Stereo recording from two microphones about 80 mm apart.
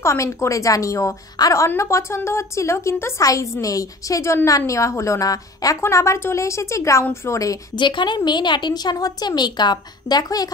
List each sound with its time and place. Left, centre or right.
0.0 s a woman's voice: left
7.7 s a woman's voice: left